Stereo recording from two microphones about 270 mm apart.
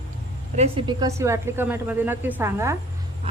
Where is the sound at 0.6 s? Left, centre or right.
Centre.